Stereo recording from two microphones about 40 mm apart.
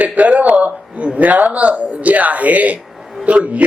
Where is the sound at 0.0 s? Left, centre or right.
Right.